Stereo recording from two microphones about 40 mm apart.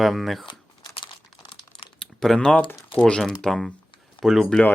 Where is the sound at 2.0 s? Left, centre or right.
Centre.